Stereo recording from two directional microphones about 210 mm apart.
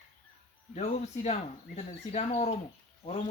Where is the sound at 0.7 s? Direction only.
35° left (ahead or behind).